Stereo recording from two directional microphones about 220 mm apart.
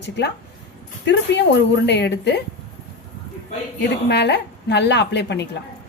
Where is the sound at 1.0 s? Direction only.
50° left (ahead or behind).